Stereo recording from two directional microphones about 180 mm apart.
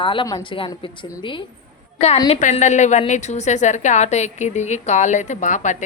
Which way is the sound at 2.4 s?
40° left (ahead or behind).